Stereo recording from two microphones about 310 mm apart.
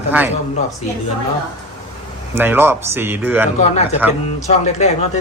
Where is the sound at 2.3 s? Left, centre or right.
Centre.